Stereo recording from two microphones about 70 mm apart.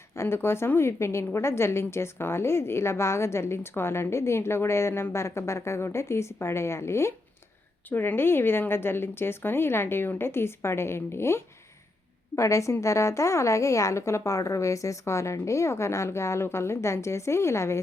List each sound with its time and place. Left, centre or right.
0.2 s a woman's voice: left
7.9 s a woman's voice: left